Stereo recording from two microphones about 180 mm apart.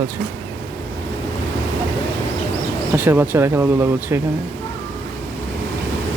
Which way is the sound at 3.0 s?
10° right (ahead or behind).